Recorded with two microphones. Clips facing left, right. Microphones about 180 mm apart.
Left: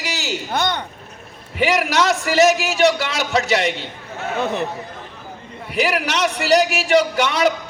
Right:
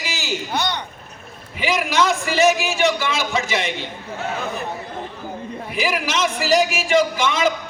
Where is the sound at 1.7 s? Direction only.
75° left (ahead or behind).